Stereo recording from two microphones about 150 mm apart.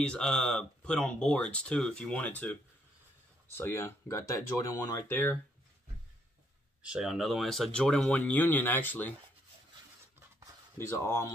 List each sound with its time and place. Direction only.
0.0 s speech: 5° left (ahead or behind)
3.5 s speech: 15° left (ahead or behind)
6.8 s speech: 5° right (ahead or behind); by 9.1 s 10° left (ahead or behind)
10.8 s speech: 15° left (ahead or behind)